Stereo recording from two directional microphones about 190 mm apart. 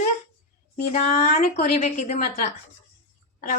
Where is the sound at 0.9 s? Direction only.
35° left (ahead or behind).